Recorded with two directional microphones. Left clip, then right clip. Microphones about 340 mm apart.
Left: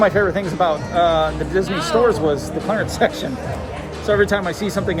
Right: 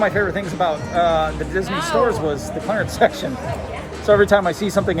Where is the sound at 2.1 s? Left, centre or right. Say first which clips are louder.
Left 3 dB; centre.